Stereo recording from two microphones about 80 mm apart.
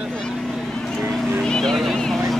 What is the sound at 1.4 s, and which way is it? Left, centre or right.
Vehicle, centre.